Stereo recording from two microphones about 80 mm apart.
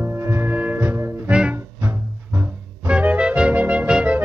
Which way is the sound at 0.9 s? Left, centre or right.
Right.